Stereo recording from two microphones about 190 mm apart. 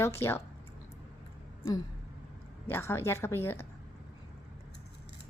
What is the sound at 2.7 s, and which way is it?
A woman's voice, 10° left (ahead or behind).